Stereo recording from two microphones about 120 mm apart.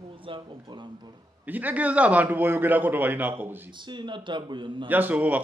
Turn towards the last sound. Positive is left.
turn(degrees=-15)  # may be behind; listen again after turning